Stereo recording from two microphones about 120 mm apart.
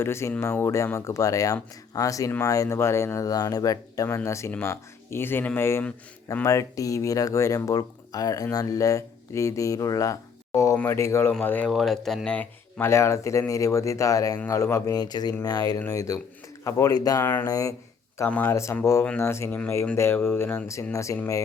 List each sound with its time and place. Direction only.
0.0 s speech: 20° left (ahead or behind)
11.7 s speech: centre (ahead or behind)
12.8 s speech: 25° left (ahead or behind)
17.2 s speech: 20° left (ahead or behind)
17.5 s speech: 30° left (ahead or behind)
18.3 s speech: 15° left (ahead or behind)